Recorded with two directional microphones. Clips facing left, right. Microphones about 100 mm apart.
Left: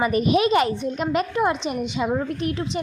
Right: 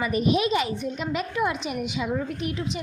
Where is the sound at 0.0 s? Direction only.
55° left (ahead or behind).